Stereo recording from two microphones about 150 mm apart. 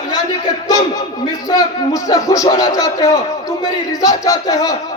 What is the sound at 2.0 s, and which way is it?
Speech, 20° left (ahead or behind).